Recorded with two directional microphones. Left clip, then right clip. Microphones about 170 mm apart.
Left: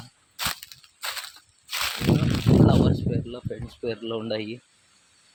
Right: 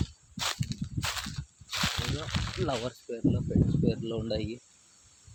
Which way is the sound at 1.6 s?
35° left (ahead or behind).